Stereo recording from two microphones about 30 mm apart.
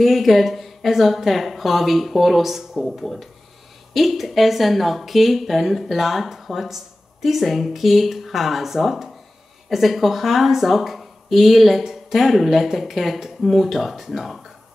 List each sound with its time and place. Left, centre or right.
0.0 s speech: centre